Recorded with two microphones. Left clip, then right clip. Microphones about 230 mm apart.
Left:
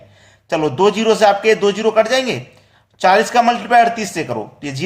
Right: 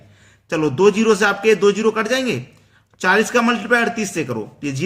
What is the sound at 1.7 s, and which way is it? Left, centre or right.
Speech, centre.